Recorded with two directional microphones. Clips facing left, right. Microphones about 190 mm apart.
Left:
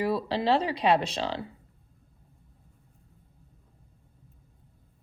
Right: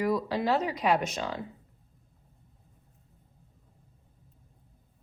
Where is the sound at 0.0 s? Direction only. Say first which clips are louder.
Left 1 dB; 30° left (ahead or behind).